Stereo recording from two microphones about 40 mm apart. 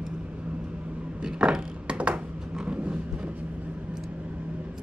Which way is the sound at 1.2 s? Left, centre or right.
Right.